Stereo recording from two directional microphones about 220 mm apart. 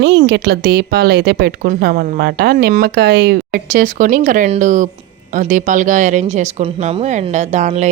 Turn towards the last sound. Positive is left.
turn(degrees=-30)  # may be behind; listen again after turning